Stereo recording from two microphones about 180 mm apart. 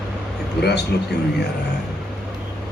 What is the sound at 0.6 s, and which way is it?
Speech, 65° left (ahead or behind).